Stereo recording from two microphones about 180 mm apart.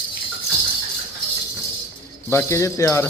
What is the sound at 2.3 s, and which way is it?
Speech, 15° left (ahead or behind).